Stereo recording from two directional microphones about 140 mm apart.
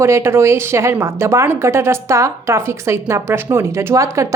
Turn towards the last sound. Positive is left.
turn(degrees=-20)  # may be behind; listen again after turning